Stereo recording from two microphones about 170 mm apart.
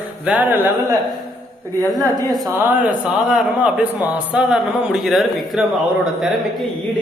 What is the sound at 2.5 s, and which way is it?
A man's voice, 10° right (ahead or behind).